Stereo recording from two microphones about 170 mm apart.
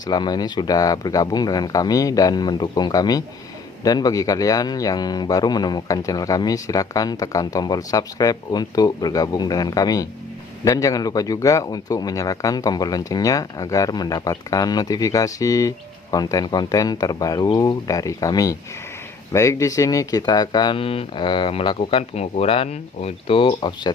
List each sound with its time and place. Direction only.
0.0 s a man's voice: 25° left (ahead or behind)